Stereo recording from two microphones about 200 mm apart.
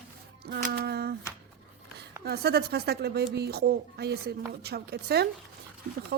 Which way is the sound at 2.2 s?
55° right (ahead or behind).